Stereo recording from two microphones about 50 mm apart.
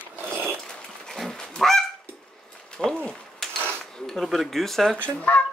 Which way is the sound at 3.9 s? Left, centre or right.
Centre.